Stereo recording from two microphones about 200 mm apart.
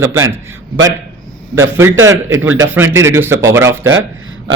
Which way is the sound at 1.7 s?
15° right (ahead or behind).